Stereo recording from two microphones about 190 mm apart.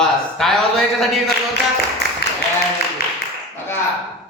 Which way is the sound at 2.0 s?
65° right (ahead or behind).